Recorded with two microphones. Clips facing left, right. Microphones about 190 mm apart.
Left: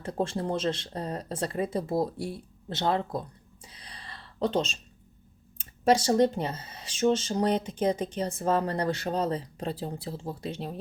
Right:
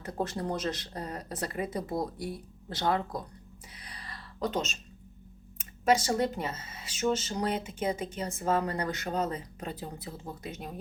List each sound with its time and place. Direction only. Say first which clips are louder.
0.0 s speech: left 3 dB; 30° left (ahead or behind)
3.8 s a sound: even; 30° left (ahead or behind)
5.5 s speech: left 3 dB; 30° left (ahead or behind)